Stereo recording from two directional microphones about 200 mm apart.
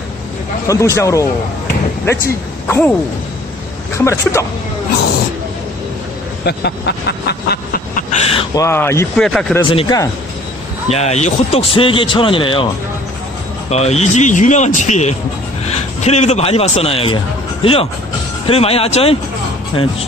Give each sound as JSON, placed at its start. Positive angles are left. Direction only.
{"t": 0.7, "sound": "speech", "side_deg": 15}
{"t": 4.0, "sound": "speech", "side_deg": 15}
{"t": 6.4, "sound": "a sound", "side_deg": 55}
{"t": 8.5, "sound": "speech", "side_deg": 10}
{"t": 9.7, "sound": "speech", "side_deg": 25}
{"t": 10.9, "sound": "speech", "side_deg": 35}
{"t": 13.7, "sound": "a man's voice", "side_deg": 35}